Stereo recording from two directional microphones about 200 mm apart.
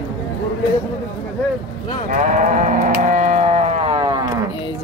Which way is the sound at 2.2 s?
40° right (ahead or behind).